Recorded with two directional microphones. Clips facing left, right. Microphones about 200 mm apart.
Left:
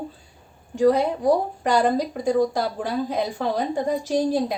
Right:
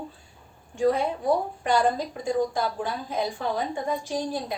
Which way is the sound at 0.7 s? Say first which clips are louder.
Left 5 dB; 40° left (ahead or behind).